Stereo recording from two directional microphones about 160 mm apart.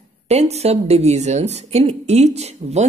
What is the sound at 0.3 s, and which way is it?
Speech, 40° right (ahead or behind).